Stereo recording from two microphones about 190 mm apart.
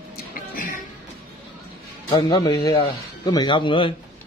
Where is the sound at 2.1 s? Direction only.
20° left (ahead or behind).